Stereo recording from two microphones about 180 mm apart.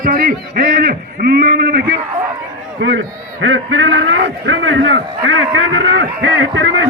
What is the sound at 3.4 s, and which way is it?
A man's voice, 90° right.